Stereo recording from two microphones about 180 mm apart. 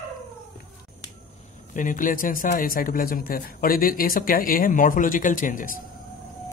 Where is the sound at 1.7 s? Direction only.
45° left (ahead or behind).